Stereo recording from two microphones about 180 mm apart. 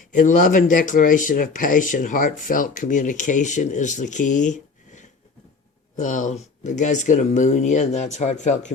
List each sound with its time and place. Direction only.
0.1 s speech: 45° left (ahead or behind)